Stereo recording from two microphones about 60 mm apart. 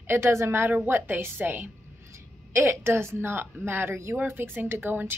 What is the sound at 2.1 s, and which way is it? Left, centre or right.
A woman's voice, right.